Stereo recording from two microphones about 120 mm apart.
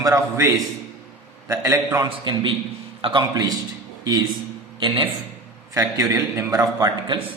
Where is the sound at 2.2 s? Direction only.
40° right (ahead or behind).